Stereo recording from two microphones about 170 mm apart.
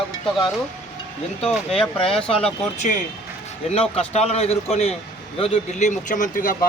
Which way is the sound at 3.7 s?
35° left (ahead or behind).